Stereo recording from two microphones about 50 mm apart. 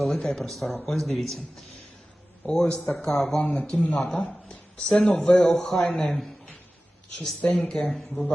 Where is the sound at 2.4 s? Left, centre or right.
Centre.